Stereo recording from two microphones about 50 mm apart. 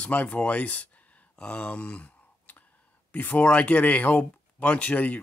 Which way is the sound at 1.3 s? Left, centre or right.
Left.